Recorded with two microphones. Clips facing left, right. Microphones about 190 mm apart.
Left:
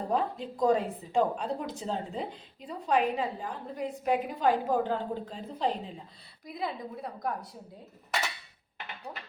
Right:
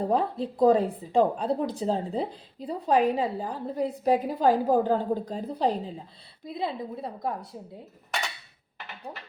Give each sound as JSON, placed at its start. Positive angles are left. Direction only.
{"t": 0.0, "sound": "a woman's voice", "side_deg": -35}
{"t": 9.1, "sound": "a woman's voice", "side_deg": -30}